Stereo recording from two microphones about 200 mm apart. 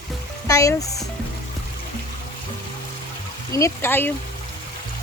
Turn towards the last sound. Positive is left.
turn(degrees=10)  # may be behind; listen again after turning